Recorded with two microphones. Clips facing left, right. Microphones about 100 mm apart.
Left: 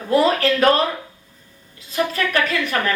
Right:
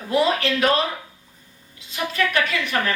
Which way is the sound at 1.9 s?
40° left (ahead or behind).